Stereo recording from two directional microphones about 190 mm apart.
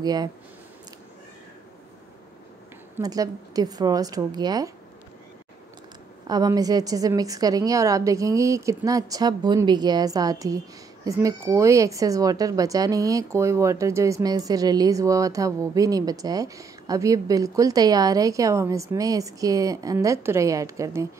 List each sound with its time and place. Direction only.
0.0 s a woman's voice: 20° right (ahead or behind)
3.0 s a woman's voice: 20° right (ahead or behind)
6.2 s a woman's voice: 20° right (ahead or behind)